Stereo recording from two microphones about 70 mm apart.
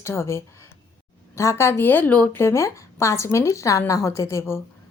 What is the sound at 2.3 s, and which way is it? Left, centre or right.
A woman's voice, left.